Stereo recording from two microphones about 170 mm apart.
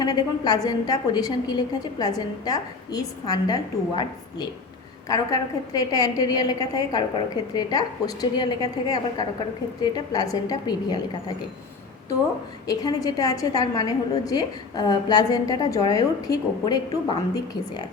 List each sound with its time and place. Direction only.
0.0 s a woman's voice: 25° left (ahead or behind)
12.6 s a woman's voice: 20° left (ahead or behind)